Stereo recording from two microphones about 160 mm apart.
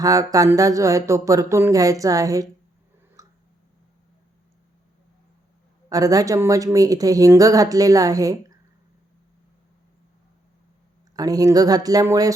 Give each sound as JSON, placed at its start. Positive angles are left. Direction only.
{"t": 0.0, "sound": "speech", "side_deg": -20}
{"t": 3.2, "sound": "tick", "side_deg": -20}
{"t": 5.9, "sound": "speech", "side_deg": -20}
{"t": 11.2, "sound": "speech", "side_deg": -20}